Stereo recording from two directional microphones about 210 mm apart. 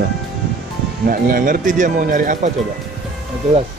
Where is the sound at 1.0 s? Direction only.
40° right (ahead or behind).